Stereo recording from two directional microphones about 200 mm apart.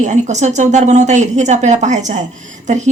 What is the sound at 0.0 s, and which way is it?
Speech, 35° right (ahead or behind).